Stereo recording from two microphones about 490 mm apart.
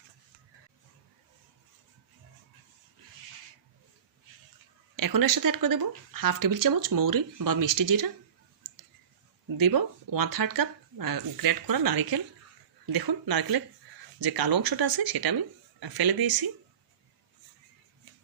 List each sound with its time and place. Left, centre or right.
4.9 s speech: right
9.6 s speech: right